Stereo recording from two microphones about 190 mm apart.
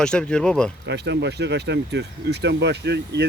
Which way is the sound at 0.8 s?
65° right (ahead or behind).